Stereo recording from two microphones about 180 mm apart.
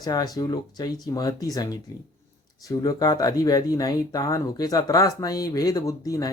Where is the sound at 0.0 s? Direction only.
20° left (ahead or behind).